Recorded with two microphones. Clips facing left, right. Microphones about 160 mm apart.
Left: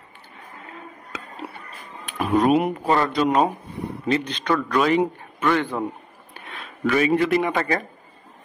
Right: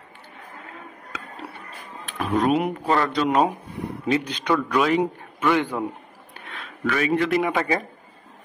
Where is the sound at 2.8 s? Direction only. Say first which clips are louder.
Left 1 dB; 10° left (ahead or behind).